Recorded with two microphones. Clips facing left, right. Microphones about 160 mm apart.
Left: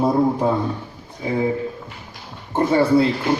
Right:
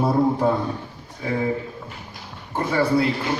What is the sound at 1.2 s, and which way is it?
Mantra, 20° left (ahead or behind).